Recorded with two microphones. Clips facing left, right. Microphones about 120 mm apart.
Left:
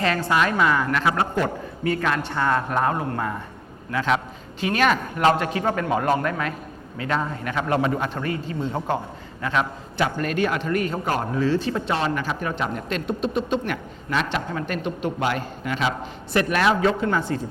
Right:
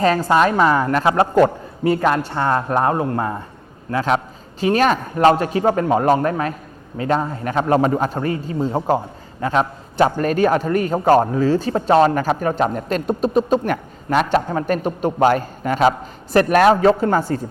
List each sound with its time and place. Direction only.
0.0 s a man's voice: 40° right (ahead or behind)